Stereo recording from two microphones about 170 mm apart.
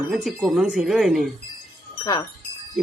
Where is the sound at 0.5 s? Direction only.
5° right (ahead or behind).